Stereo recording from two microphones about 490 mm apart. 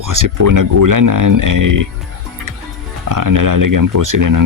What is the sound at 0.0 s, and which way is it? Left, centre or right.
Speech, right.